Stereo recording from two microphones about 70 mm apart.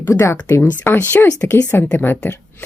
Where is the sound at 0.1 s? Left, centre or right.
Left.